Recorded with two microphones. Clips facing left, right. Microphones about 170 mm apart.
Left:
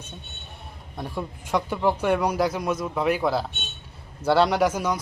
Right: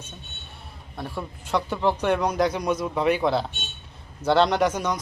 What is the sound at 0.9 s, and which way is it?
A man's voice, 15° left (ahead or behind).